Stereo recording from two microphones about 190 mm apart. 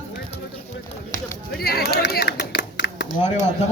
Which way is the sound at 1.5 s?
55° left (ahead or behind).